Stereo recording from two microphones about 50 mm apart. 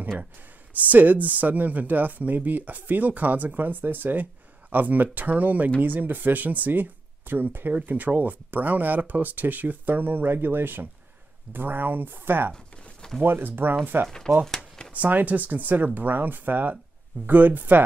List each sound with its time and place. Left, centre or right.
0.7 s speech: right
14.0 s speech: centre
15.0 s speech: right